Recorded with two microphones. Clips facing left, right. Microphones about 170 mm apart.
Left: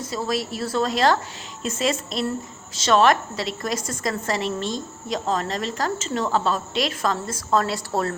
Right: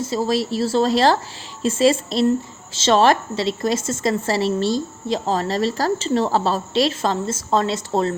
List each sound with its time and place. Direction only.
0.0 s a woman's voice: 30° right (ahead or behind)